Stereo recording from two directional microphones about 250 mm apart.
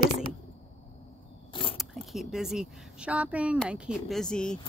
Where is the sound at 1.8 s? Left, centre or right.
Centre.